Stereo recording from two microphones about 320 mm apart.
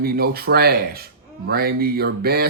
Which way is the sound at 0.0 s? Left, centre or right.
Right.